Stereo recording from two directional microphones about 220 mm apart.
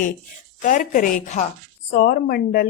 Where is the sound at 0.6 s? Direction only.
35° left (ahead or behind).